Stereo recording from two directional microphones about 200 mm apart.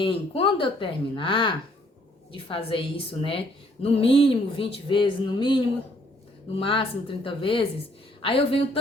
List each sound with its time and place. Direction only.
0.0 s speech: 25° left (ahead or behind)